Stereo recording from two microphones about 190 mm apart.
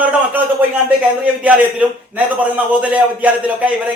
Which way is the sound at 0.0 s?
10° right (ahead or behind).